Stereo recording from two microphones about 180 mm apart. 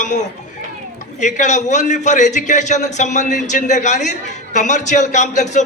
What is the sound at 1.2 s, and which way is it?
A man's voice, 40° left (ahead or behind).